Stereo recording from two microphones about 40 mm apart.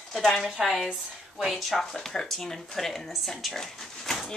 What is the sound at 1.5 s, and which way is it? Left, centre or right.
Speech, centre.